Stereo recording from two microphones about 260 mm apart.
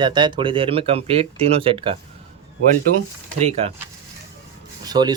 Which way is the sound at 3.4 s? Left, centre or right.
Right.